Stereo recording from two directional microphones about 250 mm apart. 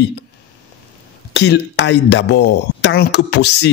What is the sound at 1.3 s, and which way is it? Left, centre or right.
Speech, left.